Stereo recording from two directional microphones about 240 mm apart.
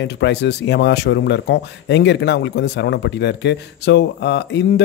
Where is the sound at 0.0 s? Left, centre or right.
Left.